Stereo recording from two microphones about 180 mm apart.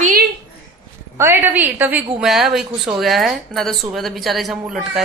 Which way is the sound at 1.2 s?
10° right (ahead or behind).